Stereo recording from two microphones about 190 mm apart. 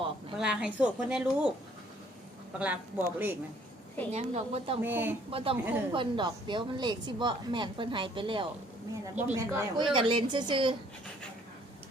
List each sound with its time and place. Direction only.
0.3 s a woman's voice: 5° right (ahead or behind)
2.6 s speech: 10° right (ahead or behind)
4.1 s a woman's voice: 35° right (ahead or behind)
4.8 s speech: 10° right (ahead or behind)
5.3 s a woman's voice: 30° right (ahead or behind)
9.1 s speech: 10° right (ahead or behind)
9.8 s a woman's voice: 25° right (ahead or behind)